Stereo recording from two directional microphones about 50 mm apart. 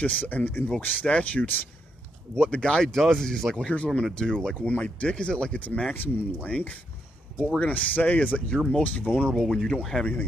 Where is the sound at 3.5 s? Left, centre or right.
Left.